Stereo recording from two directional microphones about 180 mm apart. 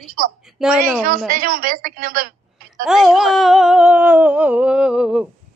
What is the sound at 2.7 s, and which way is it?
Speech, centre (ahead or behind).